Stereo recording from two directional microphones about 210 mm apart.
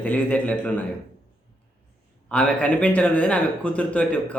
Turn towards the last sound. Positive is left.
turn(degrees=5)  # may be behind; listen again after turning